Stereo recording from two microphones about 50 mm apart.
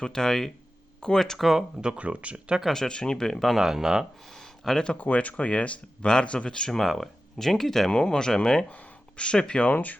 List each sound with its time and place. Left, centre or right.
0.0 s speech: centre
1.5 s speech: centre
2.6 s speech: centre
3.5 s speech: centre
4.3 s a sound: centre
4.9 s speech: left
6.7 s speech: centre
8.7 s speech: left
9.7 s speech: left